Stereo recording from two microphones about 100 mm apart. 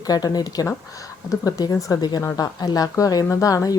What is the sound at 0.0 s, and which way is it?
Speech, 40° left (ahead or behind).